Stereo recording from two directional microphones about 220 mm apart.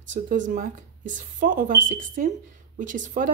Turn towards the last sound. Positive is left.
turn(degrees=-35)  # may be behind; listen again after turning